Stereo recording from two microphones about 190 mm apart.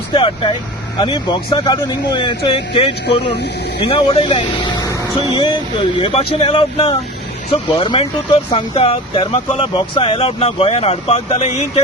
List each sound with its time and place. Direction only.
0.1 s speech: 25° left (ahead or behind)